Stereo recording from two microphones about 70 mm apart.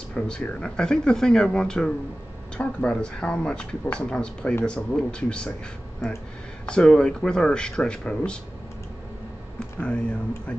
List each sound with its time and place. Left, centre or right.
0.1 s speech: centre
6.6 s speech: centre
9.6 s speech: centre